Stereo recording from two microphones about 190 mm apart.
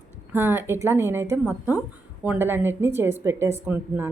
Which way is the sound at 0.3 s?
10° right (ahead or behind).